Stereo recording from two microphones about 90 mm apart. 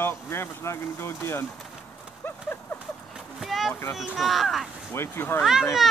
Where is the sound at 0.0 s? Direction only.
25° left (ahead or behind).